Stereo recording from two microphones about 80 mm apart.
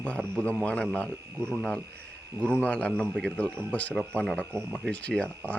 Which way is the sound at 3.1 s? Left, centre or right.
Centre.